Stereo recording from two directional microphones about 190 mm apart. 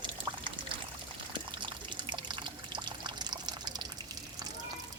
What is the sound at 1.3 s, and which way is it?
Water, 25° right (ahead or behind).